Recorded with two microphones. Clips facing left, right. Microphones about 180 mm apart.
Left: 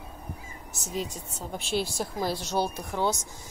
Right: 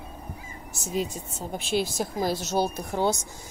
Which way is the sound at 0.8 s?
10° right (ahead or behind).